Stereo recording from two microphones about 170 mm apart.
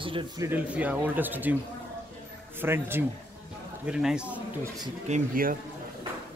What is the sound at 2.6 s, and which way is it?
A man's voice, 15° right (ahead or behind).